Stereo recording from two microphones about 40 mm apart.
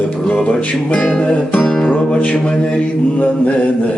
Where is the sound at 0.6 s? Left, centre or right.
Left.